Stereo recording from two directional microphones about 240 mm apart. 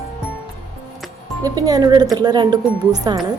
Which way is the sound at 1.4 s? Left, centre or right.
Centre.